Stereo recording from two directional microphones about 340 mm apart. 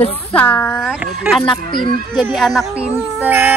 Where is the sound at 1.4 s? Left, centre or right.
Centre.